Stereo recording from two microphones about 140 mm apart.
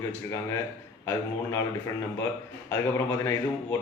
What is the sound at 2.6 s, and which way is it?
Speech, 20° left (ahead or behind).